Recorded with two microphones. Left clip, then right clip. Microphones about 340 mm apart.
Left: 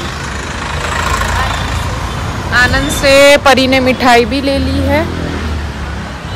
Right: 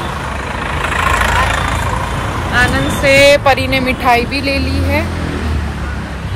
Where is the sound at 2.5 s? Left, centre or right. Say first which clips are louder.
Left 3 dB; centre.